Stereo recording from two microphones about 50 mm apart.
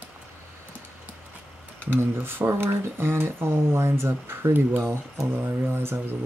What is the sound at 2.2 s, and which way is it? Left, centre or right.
Speech, right.